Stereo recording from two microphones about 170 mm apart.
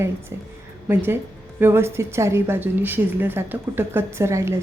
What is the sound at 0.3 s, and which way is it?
A woman's voice, 15° right (ahead or behind).